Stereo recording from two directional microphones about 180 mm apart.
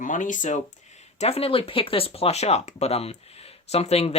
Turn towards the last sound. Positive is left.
turn(degrees=35)  # may be behind; listen again after turning